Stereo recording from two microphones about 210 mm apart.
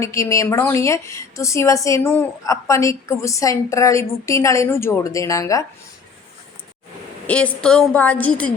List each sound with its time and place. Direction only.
0.0 s a woman's voice: 15° left (ahead or behind)
7.3 s a woman's voice: 5° left (ahead or behind)